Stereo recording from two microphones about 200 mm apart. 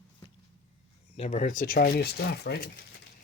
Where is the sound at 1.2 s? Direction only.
35° left (ahead or behind); by 2.7 s 50° left (ahead or behind).